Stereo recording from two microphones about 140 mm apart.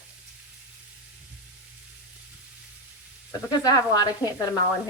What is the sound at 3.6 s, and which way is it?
Speech, 30° left (ahead or behind).